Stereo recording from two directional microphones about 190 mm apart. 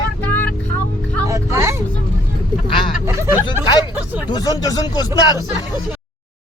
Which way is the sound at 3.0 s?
15° right (ahead or behind).